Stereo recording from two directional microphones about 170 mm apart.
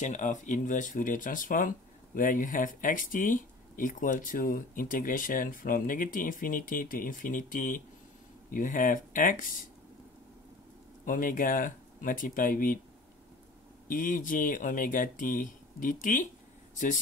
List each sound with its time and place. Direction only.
0.0 s speech: 45° left (ahead or behind)
11.1 s speech: 55° left (ahead or behind)
13.8 s speech: 50° left (ahead or behind)